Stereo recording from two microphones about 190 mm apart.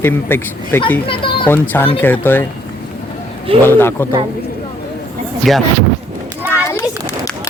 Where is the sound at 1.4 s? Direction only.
10° left (ahead or behind).